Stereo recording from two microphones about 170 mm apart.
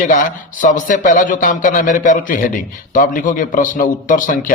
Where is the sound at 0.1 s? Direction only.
50° left (ahead or behind).